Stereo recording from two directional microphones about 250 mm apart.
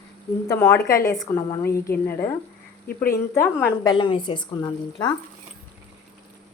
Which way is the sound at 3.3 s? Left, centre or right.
Centre.